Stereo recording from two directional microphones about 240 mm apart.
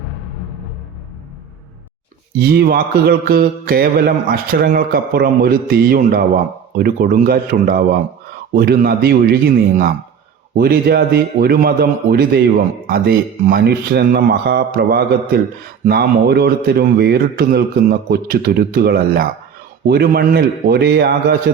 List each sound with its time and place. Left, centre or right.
2.4 s a man's voice: right